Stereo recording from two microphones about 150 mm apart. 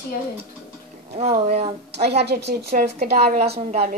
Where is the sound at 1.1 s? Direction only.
45° right (ahead or behind).